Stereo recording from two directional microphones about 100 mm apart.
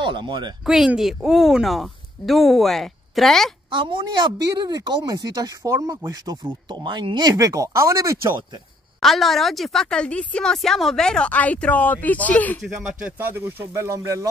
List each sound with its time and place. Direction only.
0.0 s speech: 50° right (ahead or behind)
0.7 s speech: 5° right (ahead or behind)
3.7 s a woman's voice: 55° right (ahead or behind)
4.6 s speech: 45° right (ahead or behind)
9.0 s a woman's voice: centre (ahead or behind)
13.0 s speech: 20° right (ahead or behind)